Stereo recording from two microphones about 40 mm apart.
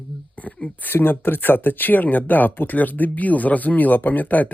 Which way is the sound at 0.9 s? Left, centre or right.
Left.